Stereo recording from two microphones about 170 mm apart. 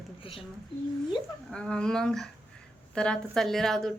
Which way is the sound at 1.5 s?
5° left (ahead or behind).